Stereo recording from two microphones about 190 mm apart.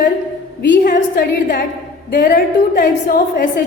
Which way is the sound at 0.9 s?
50° left (ahead or behind).